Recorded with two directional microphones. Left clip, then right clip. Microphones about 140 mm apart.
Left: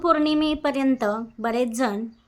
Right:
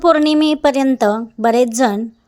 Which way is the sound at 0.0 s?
55° right (ahead or behind).